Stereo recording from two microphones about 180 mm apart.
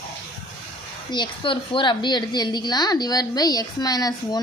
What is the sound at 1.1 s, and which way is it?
A woman's voice, 25° left (ahead or behind).